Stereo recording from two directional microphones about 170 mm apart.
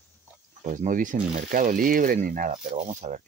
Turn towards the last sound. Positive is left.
turn(degrees=-45)  # may be behind; listen again after turning